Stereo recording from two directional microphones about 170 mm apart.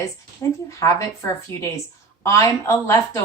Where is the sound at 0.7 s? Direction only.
20° left (ahead or behind).